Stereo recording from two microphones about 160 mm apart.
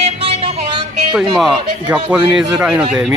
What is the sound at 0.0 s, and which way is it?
Music, 35° right (ahead or behind).